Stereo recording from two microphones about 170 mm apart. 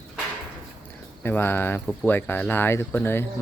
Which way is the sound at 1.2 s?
15° left (ahead or behind).